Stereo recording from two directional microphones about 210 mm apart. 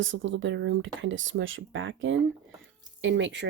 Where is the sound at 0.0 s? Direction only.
65° right (ahead or behind).